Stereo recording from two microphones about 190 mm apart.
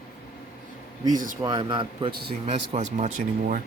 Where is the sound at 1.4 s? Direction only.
25° right (ahead or behind).